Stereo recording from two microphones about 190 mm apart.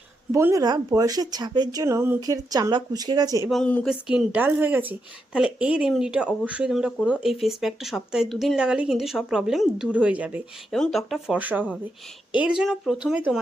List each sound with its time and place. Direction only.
0.3 s speech: 15° right (ahead or behind)
3.5 s a woman's voice: 5° left (ahead or behind)